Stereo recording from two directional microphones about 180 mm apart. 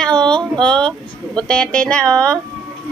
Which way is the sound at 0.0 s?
5° left (ahead or behind).